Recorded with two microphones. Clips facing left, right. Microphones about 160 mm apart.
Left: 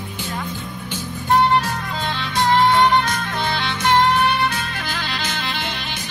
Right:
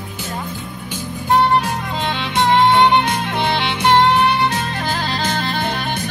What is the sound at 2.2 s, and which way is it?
Music, 25° right (ahead or behind).